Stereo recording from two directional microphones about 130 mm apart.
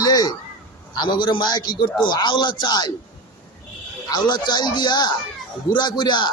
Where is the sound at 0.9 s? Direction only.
35° left (ahead or behind).